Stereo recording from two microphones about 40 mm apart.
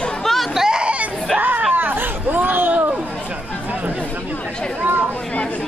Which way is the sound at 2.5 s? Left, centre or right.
Right.